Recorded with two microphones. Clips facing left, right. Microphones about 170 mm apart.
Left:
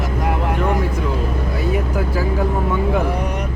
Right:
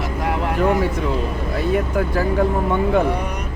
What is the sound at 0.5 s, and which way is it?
Music, centre (ahead or behind).